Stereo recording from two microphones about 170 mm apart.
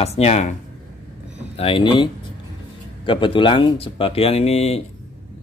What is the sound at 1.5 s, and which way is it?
Speech, 30° left (ahead or behind).